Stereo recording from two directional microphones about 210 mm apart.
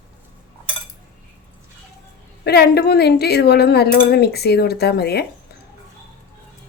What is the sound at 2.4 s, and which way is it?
A woman's voice, 50° left (ahead or behind).